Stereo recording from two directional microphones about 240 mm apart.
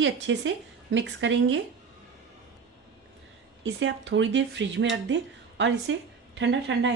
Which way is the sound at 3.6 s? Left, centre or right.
Right.